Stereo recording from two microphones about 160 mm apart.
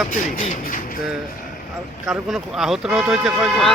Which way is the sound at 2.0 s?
Centre (ahead or behind).